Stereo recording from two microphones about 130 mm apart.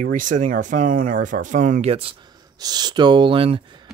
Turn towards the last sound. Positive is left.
turn(degrees=-35)  # may be behind; listen again after turning